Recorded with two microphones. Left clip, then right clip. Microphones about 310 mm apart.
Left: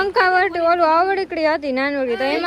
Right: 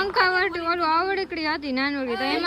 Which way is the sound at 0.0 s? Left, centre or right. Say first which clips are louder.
Left 5 dB; centre.